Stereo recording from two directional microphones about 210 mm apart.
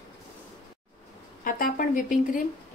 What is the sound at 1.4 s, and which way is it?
Speech, 40° left (ahead or behind).